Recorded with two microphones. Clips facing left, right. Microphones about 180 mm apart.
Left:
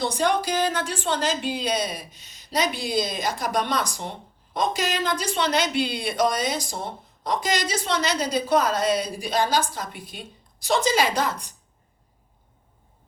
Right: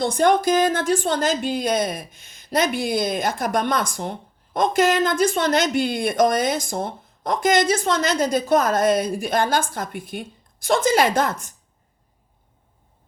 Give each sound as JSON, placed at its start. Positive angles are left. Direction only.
{"t": 0.0, "sound": "speech", "side_deg": -50}